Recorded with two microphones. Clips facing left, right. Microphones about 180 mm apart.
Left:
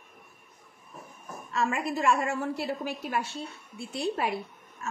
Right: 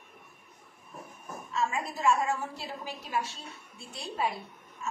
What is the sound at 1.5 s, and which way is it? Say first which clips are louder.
A woman's voice: left 3 dB; 65° left (ahead or behind).